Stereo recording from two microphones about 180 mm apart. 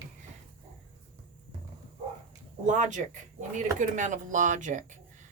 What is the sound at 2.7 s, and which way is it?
Speech, 45° right (ahead or behind).